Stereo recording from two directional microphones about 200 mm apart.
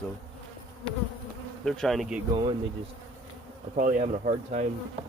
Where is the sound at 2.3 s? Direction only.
25° right (ahead or behind).